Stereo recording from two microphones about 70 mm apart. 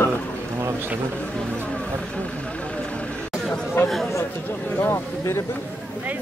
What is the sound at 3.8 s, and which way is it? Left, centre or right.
Speech, left.